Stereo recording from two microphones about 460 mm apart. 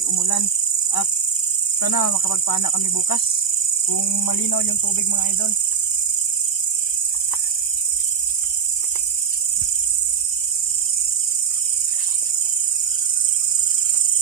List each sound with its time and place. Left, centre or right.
0.0 s cricket: left
1.8 s speech: left